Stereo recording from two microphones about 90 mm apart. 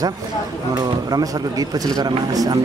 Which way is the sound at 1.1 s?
45° right (ahead or behind).